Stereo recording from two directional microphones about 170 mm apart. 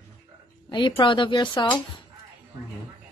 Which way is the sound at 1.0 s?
30° left (ahead or behind).